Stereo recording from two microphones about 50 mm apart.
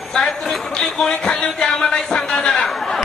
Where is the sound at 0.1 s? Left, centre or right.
Centre.